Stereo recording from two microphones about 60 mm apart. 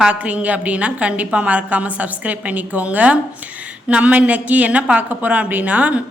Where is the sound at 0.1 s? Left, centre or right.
Right.